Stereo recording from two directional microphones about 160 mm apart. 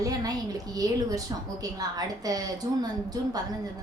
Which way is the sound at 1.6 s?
25° right (ahead or behind).